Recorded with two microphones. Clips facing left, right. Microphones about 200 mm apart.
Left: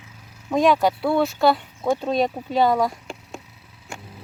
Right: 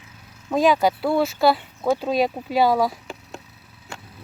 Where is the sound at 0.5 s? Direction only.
Centre (ahead or behind).